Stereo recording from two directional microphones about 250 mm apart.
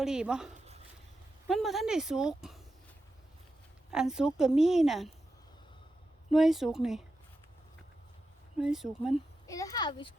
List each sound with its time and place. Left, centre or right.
0.0 s a woman's voice: centre
3.9 s a woman's voice: centre
6.3 s a woman's voice: centre
8.5 s a woman's voice: centre
9.5 s a child's voice: centre